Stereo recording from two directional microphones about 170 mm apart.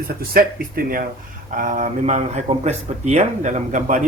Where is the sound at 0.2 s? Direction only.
60° right (ahead or behind).